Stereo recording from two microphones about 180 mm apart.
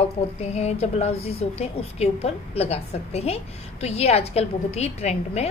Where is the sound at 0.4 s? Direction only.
35° left (ahead or behind).